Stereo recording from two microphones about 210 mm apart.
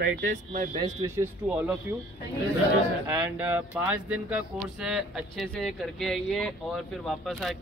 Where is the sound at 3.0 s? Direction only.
10° right (ahead or behind).